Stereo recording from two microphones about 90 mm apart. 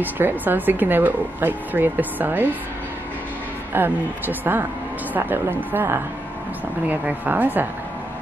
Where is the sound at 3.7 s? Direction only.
20° right (ahead or behind).